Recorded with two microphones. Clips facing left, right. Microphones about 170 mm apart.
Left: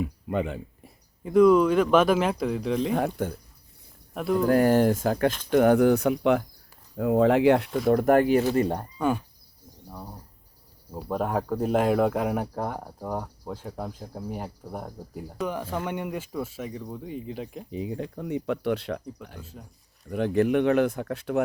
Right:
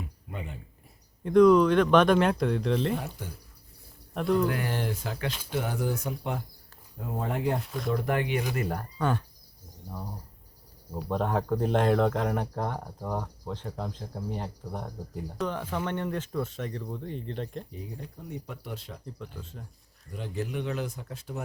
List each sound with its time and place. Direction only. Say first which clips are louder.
0.0 s speech: left 12 dB; 90° left
1.2 s speech: left 1 dB; 5° left (ahead or behind)
2.9 s speech: left 8 dB; 55° left (ahead or behind)
4.1 s speech: even; 5° left (ahead or behind)
4.4 s speech: left 8 dB; 45° left (ahead or behind); by 7.8 s 80° left
7.9 s speech: left 9 dB; 50° left (ahead or behind)
8.5 s speech: left 7 dB; 30° left (ahead or behind)
9.0 s speech: left 3 dB; 10° left (ahead or behind)
10.9 s speech: left 1 dB; 5° left (ahead or behind)
17.7 s speech: left 10 dB; 90° left; by 19.0 s 70° left (ahead or behind)
19.4 s speech: even; 5° left (ahead or behind)
20.1 s speech: left 12 dB; 65° left (ahead or behind)